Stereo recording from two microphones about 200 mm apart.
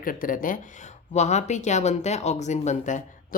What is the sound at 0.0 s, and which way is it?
Speech, 45° left (ahead or behind).